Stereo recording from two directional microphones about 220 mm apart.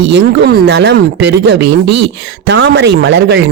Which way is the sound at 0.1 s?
50° right (ahead or behind).